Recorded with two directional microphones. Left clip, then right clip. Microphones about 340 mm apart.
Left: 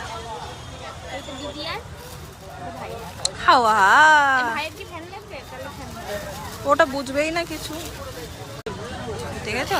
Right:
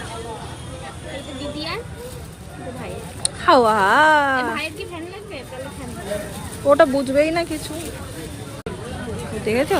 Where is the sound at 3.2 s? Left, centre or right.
Centre.